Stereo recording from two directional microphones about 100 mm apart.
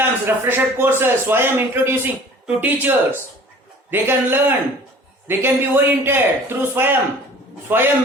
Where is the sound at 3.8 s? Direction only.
20° right (ahead or behind).